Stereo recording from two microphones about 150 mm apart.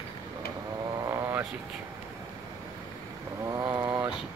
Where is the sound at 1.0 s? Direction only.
20° right (ahead or behind).